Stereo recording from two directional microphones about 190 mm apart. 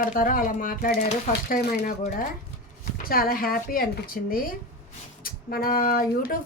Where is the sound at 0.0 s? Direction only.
50° left (ahead or behind).